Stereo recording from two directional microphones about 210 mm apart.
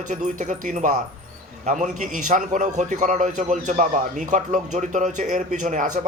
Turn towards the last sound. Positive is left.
turn(degrees=-35)  # may be behind; listen again after turning